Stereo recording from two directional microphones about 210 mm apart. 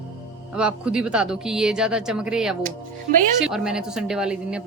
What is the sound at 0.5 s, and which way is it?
Speech, 5° right (ahead or behind).